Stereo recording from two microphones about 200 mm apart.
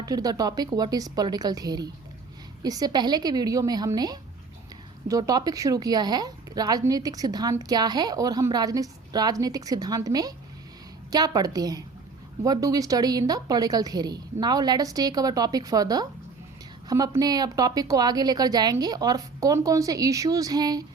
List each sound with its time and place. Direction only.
0.0 s a woman's voice: 20° right (ahead or behind)